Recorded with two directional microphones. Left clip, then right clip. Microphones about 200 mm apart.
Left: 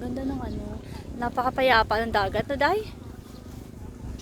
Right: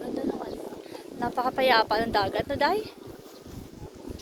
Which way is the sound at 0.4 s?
5° left (ahead or behind).